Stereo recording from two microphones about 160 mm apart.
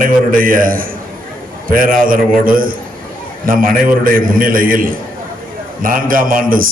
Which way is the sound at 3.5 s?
60° right (ahead or behind).